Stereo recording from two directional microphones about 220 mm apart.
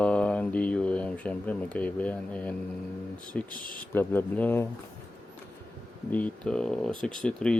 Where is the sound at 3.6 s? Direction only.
40° left (ahead or behind).